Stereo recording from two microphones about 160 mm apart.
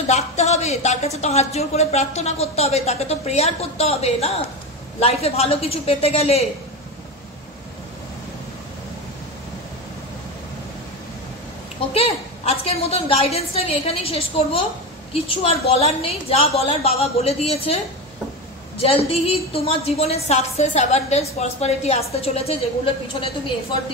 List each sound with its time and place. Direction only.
0.1 s a woman's voice: 45° left (ahead or behind)
11.9 s a woman's voice: 40° left (ahead or behind)
18.8 s a woman's voice: 35° left (ahead or behind)